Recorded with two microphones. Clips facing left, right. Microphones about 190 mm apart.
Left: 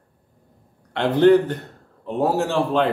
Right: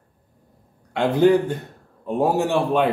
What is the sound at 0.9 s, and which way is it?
Speech, 10° right (ahead or behind).